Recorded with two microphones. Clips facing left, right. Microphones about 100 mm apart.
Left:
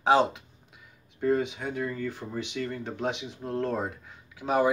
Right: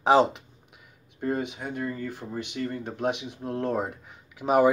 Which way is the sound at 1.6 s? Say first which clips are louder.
Even; 5° right (ahead or behind).